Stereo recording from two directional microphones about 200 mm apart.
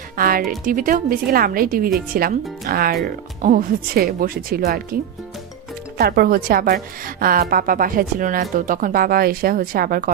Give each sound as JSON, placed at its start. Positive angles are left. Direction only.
{"t": 0.2, "sound": "a woman's voice", "side_deg": -45}